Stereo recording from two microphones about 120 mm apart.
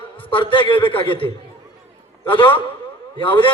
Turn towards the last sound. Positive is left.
turn(degrees=45)  # may be behind; listen again after turning